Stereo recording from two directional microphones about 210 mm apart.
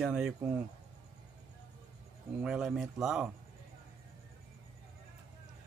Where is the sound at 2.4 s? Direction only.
Centre (ahead or behind).